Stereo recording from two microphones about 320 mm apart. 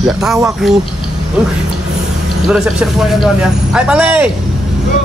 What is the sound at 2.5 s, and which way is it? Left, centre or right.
Speech, centre.